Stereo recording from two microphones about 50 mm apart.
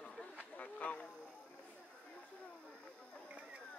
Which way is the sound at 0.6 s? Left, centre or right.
Left.